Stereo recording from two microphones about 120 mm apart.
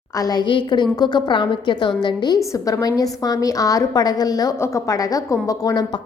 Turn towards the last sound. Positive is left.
turn(degrees=30)  # may be behind; listen again after turning